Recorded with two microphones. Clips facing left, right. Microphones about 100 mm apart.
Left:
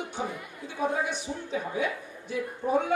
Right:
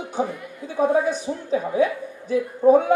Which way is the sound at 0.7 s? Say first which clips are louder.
Right 9 dB; 40° right (ahead or behind).